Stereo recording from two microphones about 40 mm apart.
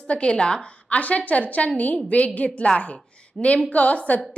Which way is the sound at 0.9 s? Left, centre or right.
Left.